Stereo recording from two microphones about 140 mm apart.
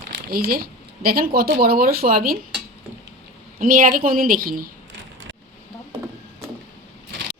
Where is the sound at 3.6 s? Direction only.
80° right.